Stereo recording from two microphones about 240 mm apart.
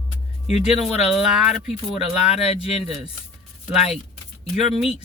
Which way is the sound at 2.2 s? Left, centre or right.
Left.